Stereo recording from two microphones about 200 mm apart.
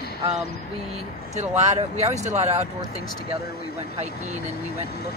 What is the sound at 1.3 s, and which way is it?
Speech, 35° right (ahead or behind).